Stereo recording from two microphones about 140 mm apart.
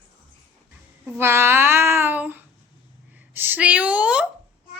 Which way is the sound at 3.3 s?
15° right (ahead or behind).